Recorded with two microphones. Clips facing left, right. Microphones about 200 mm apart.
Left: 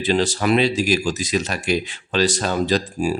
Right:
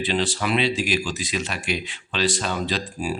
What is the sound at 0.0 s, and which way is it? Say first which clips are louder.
Speech: left 5 dB; 40° left (ahead or behind).